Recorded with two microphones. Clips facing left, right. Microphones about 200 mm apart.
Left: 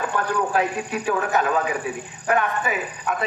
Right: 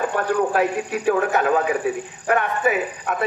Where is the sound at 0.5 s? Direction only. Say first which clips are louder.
Right 2 dB; 55° right (ahead or behind).